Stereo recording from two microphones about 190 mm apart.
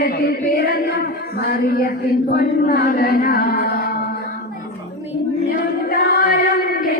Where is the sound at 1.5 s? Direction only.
55° left (ahead or behind).